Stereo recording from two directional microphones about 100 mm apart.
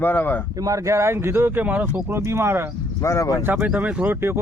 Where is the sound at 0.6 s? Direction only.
35° right (ahead or behind); by 2.0 s 15° right (ahead or behind).